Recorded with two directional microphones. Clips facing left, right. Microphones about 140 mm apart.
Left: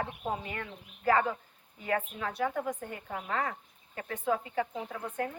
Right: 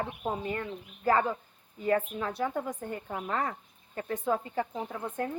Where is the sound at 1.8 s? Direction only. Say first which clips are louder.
Right 4 dB; 35° right (ahead or behind).